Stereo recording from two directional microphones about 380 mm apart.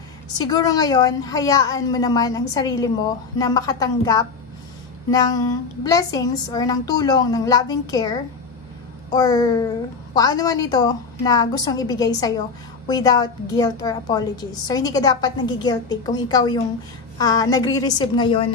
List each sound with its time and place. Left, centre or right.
0.4 s a woman's voice: centre